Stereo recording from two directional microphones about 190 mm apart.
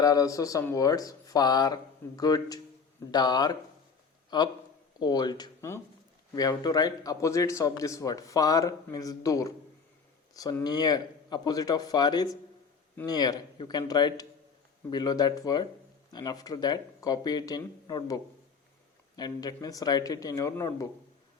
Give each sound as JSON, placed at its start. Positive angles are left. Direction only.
{"t": 0.0, "sound": "a man's voice", "side_deg": 20}